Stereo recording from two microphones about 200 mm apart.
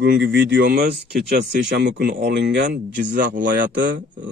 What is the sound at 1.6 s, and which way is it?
A man's voice, 60° right (ahead or behind).